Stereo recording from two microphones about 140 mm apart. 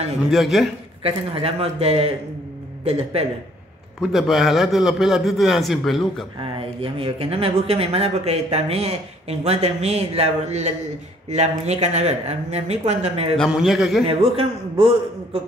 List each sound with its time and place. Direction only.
0.3 s a man's voice: centre (ahead or behind)
1.0 s speech: 45° right (ahead or behind)
4.0 s a man's voice: centre (ahead or behind)
6.4 s speech: 40° right (ahead or behind)
13.4 s a man's voice: 5° right (ahead or behind)
14.3 s a man's voice: 40° right (ahead or behind)